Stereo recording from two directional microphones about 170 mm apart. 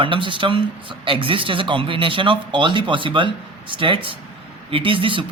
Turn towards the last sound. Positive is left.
turn(degrees=-30)  # may be behind; listen again after turning